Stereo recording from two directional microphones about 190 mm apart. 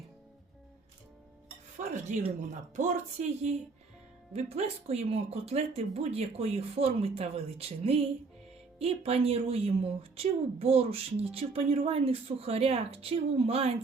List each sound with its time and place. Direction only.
1.8 s cutlery: 40° right (ahead or behind)
2.7 s speech: 40° right (ahead or behind)